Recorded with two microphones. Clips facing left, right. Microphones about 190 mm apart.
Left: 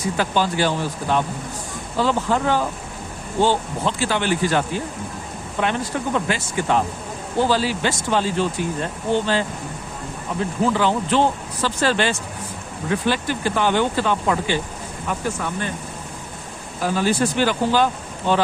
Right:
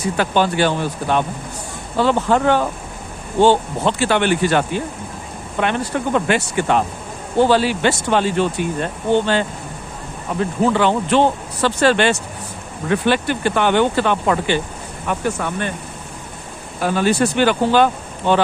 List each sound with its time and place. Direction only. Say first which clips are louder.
0.0 s speech: right 3 dB; 65° right (ahead or behind)
10.6 s speech: right 3 dB; 65° right (ahead or behind)
16.8 s speech: right 3 dB; 65° right (ahead or behind)